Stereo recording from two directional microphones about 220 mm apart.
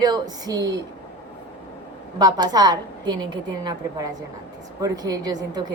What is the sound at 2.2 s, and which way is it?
A woman's voice, 15° right (ahead or behind).